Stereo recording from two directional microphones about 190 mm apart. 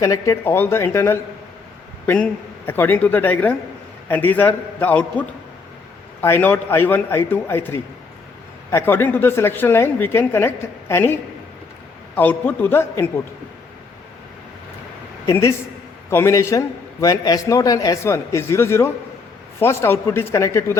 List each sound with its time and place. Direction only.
0.0 s a man's voice: 15° left (ahead or behind)
6.2 s a man's voice: 10° left (ahead or behind)
15.3 s a man's voice: 15° left (ahead or behind)